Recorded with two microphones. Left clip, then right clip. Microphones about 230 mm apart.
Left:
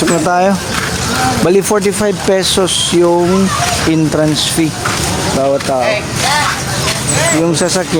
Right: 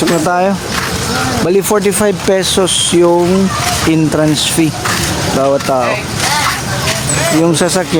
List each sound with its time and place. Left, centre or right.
0.1 s speech: centre
1.7 s speech: centre
5.4 s speech: centre